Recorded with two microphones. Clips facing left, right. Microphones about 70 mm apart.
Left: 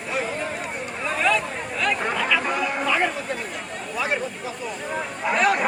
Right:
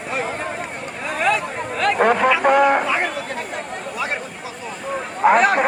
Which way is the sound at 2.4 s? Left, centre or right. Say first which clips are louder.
Right 11 dB; right.